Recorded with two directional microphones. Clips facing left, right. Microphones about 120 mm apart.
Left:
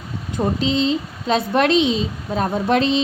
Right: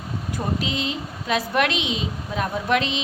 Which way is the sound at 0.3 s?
30° left (ahead or behind).